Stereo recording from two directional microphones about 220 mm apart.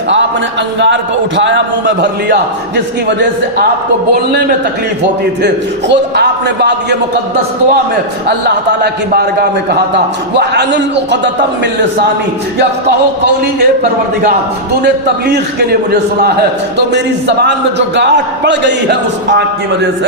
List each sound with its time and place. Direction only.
1.4 s a man's voice: 55° right (ahead or behind)
5.9 s a man's voice: 50° right (ahead or behind)
8.4 s a man's voice: 50° right (ahead or behind)
16.7 s a man's voice: 50° right (ahead or behind)